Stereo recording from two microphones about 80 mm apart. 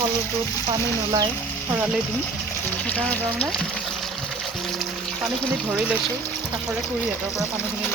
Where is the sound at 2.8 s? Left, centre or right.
Centre.